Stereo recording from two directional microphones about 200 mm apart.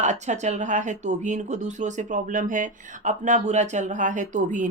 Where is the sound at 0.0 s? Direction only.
35° right (ahead or behind).